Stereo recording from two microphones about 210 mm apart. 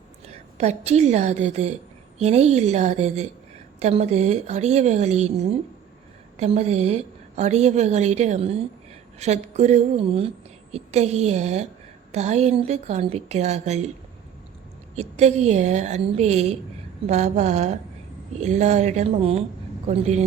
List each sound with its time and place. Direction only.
0.6 s speech: 30° right (ahead or behind)
14.9 s speech: 30° right (ahead or behind)